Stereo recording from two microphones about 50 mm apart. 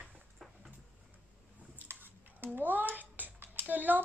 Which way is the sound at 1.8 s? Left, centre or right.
Right.